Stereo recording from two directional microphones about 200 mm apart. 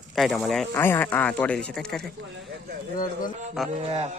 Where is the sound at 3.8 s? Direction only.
30° right (ahead or behind).